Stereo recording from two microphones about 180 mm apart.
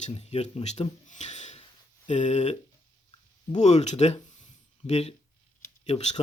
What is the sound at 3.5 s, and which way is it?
Speech, 40° left (ahead or behind).